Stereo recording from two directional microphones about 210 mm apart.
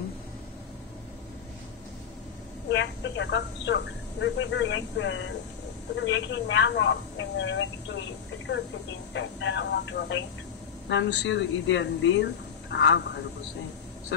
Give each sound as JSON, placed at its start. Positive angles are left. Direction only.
{"t": 2.7, "sound": "speech", "side_deg": 60}
{"t": 9.1, "sound": "speech", "side_deg": 60}